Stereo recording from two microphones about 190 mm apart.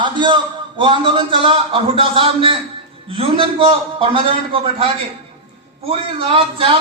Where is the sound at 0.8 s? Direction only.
25° right (ahead or behind).